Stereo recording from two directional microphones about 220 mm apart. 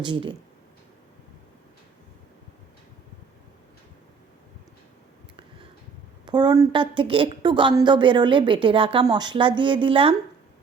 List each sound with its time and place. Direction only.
0.0 s a woman's voice: 20° right (ahead or behind)
6.2 s a woman's voice: 20° right (ahead or behind)